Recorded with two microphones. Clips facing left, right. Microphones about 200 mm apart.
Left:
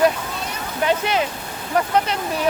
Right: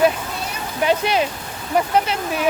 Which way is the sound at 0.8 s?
20° right (ahead or behind).